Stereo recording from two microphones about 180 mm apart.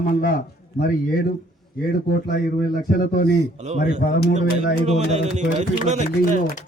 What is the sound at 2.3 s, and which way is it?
Speech, 55° left (ahead or behind).